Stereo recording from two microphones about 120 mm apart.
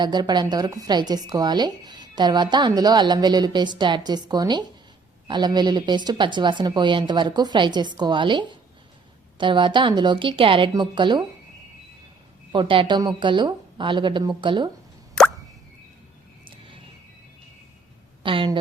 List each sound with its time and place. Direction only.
0.0 s a woman's voice: 35° right (ahead or behind)
12.5 s a woman's voice: 45° right (ahead or behind)
15.2 s plop: 5° left (ahead or behind)
16.5 s music: 45° right (ahead or behind)
18.2 s a woman's voice: 45° right (ahead or behind)